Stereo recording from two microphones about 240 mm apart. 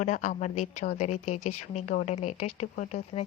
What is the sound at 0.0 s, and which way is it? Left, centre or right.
A woman's voice, left.